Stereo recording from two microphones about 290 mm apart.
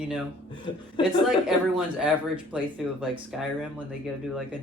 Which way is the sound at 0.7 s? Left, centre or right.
Centre.